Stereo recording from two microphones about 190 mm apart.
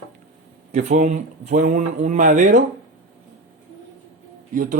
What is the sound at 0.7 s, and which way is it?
Speech, 40° right (ahead or behind).